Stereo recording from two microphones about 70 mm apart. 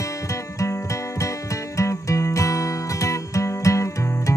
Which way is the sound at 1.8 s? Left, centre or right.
Left.